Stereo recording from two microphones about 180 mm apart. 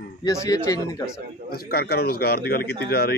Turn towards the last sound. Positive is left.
turn(degrees=60)  # may be behind; listen again after turning